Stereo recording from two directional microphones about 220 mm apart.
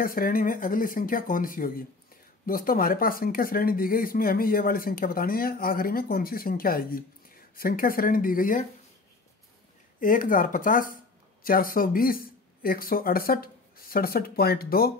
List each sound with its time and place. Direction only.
0.0 s speech: 40° left (ahead or behind)
9.9 s speech: 35° left (ahead or behind)